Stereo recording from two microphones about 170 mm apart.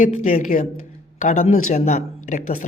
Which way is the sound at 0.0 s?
50° left (ahead or behind).